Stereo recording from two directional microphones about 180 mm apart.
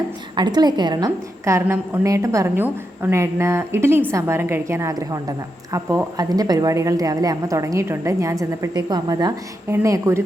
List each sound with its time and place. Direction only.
0.3 s a woman's voice: 25° right (ahead or behind)